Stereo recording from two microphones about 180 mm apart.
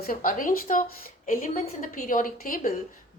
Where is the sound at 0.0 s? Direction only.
50° left (ahead or behind).